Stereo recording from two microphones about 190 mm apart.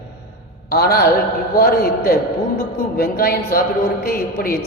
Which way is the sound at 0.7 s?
55° left (ahead or behind).